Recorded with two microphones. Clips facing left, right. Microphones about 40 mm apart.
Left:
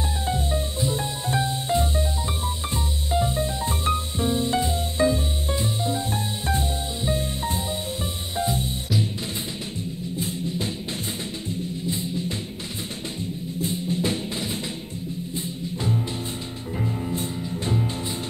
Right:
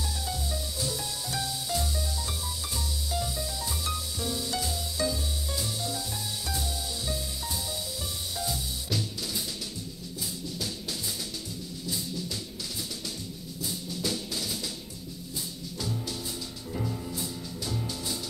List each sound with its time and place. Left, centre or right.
0.3 s music: left
10.1 s music: left
11.8 s music: left
13.6 s music: left